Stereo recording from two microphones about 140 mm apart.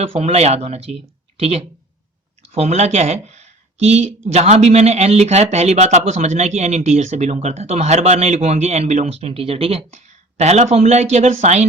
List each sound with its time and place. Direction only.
0.0 s a man's voice: 45° right (ahead or behind)